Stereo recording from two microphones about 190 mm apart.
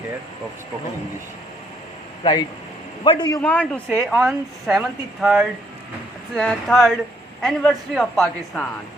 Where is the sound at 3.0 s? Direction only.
25° left (ahead or behind).